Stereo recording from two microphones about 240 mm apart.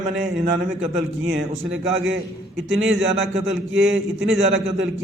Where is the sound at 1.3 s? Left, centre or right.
Right.